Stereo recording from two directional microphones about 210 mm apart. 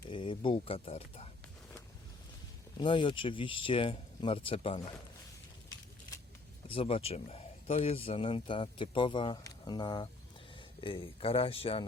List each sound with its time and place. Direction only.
0.1 s speech: 25° left (ahead or behind)
2.8 s speech: 25° left (ahead or behind)
5.6 s a sound: 15° left (ahead or behind)
6.7 s speech: 25° left (ahead or behind)